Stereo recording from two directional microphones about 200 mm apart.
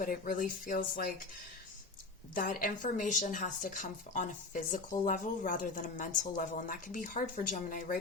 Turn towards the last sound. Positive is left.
turn(degrees=45)  # may be behind; listen again after turning